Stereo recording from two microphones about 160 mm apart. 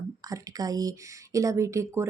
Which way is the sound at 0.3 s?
20° right (ahead or behind).